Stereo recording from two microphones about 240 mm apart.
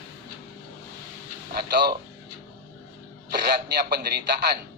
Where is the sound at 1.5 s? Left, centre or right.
Right.